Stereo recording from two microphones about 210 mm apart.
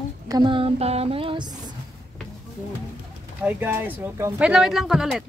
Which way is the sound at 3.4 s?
10° right (ahead or behind).